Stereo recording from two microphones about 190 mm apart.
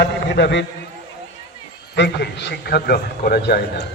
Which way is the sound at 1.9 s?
60° left (ahead or behind).